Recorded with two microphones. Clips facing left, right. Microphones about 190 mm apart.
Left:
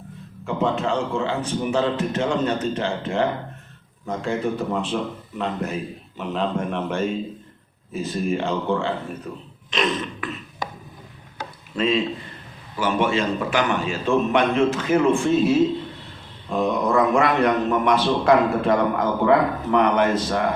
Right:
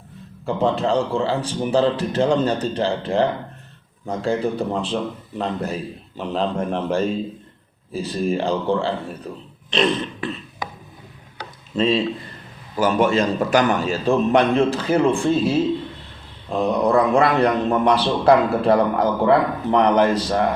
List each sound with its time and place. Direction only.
0.4 s a man's voice: 35° right (ahead or behind)
11.8 s a man's voice: 30° right (ahead or behind)